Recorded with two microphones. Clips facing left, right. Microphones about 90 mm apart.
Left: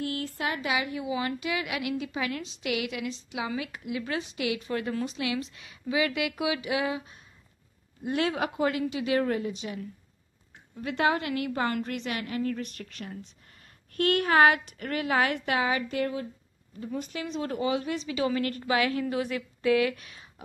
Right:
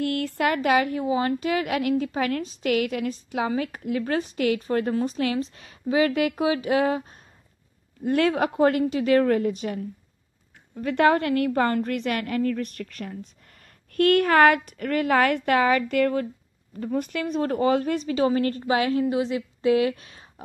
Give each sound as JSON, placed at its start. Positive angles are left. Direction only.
{"t": 0.0, "sound": "a woman's voice", "side_deg": -65}